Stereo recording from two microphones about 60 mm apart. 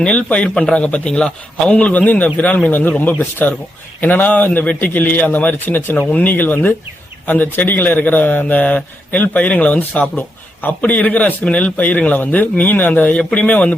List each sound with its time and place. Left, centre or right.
0.0 s a man's voice: left
1.7 s speech: left